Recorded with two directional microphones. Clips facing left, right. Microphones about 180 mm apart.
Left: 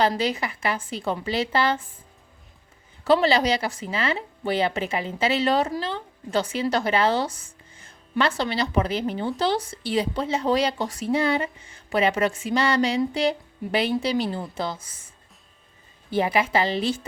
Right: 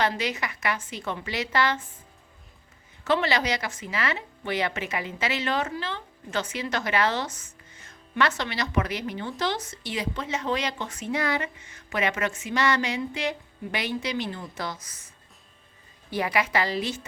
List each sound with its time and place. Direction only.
0.0 s a woman's voice: 30° left (ahead or behind)
3.0 s a woman's voice: 35° left (ahead or behind)
16.1 s a woman's voice: 25° left (ahead or behind)